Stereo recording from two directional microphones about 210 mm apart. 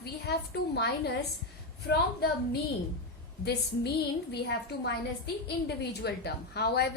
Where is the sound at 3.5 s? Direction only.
50° left (ahead or behind).